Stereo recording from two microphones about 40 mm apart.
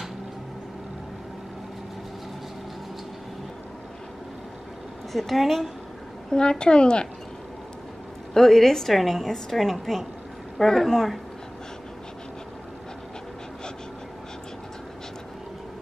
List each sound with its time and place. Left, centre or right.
5.1 s a woman's voice: centre
6.6 s speech: left
8.3 s a woman's voice: centre